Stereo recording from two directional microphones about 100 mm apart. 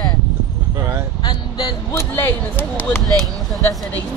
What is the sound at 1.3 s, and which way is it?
Vehicle, 40° left (ahead or behind).